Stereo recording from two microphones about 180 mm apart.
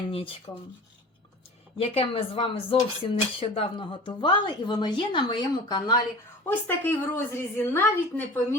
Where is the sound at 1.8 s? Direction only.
30° left (ahead or behind).